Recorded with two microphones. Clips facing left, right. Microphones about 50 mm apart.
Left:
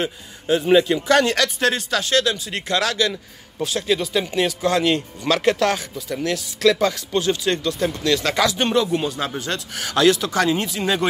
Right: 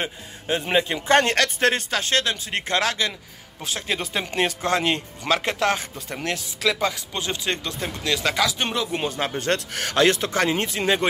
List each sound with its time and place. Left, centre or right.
0.0 s speech: right
5.9 s speech: right
6.6 s speech: centre
8.9 s speech: right
9.4 s speech: right